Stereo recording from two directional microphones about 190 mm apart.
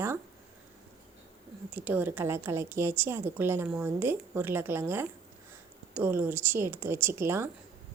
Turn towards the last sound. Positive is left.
turn(degrees=-15)  # may be behind; listen again after turning